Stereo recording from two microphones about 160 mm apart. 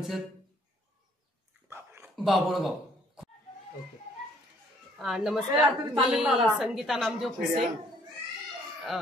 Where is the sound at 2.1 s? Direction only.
Centre (ahead or behind).